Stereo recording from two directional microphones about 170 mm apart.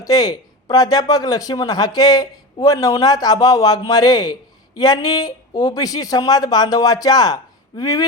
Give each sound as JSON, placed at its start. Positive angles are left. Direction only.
{"t": 0.0, "sound": "speech", "side_deg": 20}